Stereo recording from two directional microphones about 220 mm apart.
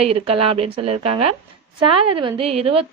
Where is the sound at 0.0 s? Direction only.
25° right (ahead or behind).